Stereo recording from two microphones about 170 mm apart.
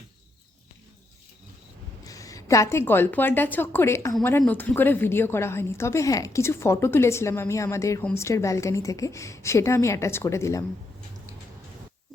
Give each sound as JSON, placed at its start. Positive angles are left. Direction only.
{"t": 2.0, "sound": "a woman's voice", "side_deg": 20}